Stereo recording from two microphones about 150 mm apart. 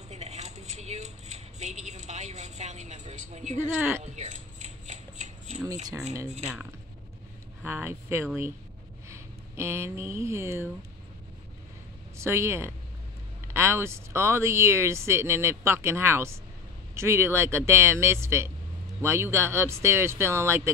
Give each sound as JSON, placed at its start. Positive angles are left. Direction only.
{"t": 0.1, "sound": "speech", "side_deg": -45}
{"t": 3.5, "sound": "speech", "side_deg": -15}
{"t": 4.0, "sound": "shuffling cards", "side_deg": -50}
{"t": 7.6, "sound": "speech", "side_deg": -15}
{"t": 12.2, "sound": "speech", "side_deg": -15}